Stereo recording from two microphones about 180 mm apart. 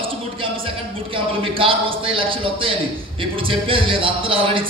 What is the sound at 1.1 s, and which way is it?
A man's voice, 30° right (ahead or behind).